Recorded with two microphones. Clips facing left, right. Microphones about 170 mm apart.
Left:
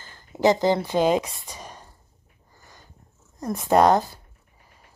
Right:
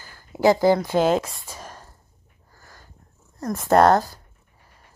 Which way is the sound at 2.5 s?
15° left (ahead or behind).